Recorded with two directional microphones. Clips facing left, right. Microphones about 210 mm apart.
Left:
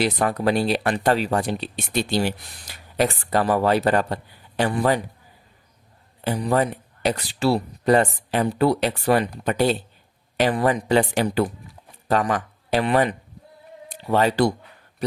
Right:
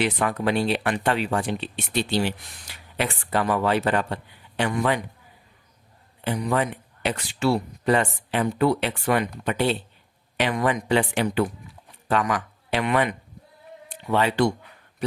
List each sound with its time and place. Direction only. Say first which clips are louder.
0.0 s speech: left 2 dB; 40° left (ahead or behind)
6.2 s speech: left 3 dB; 35° left (ahead or behind)